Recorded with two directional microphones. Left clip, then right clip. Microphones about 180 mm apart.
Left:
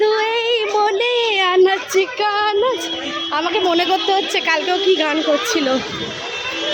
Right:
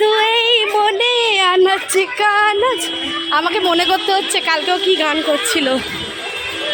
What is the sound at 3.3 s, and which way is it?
A woman's voice, 5° right (ahead or behind).